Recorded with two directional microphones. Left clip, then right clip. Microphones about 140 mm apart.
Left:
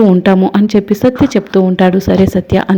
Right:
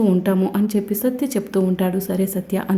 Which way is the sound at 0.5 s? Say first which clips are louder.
Left 10 dB; 45° left (ahead or behind).